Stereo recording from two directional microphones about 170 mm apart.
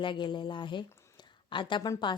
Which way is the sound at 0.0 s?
30° left (ahead or behind).